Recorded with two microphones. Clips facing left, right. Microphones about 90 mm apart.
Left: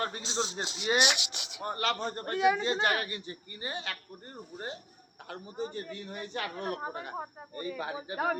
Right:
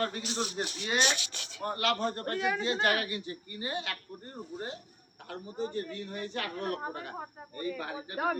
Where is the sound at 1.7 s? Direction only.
Centre (ahead or behind).